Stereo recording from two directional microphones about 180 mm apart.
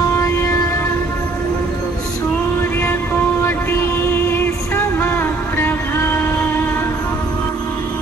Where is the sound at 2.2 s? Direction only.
15° left (ahead or behind).